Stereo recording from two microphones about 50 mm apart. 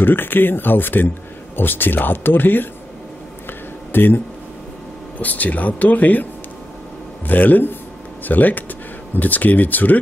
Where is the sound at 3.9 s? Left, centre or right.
Left.